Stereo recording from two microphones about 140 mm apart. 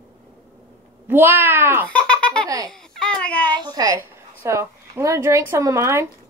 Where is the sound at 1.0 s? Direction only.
15° right (ahead or behind).